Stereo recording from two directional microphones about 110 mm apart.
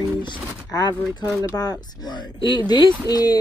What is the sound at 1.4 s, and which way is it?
Speech, 35° left (ahead or behind).